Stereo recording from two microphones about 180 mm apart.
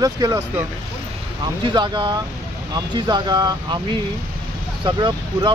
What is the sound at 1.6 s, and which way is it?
Speech, 25° right (ahead or behind).